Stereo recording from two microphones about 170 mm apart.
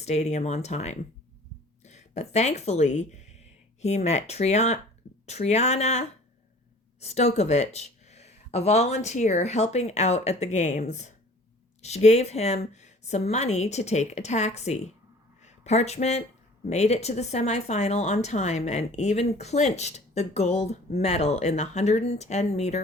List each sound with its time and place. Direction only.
0.0 s speech: 40° left (ahead or behind)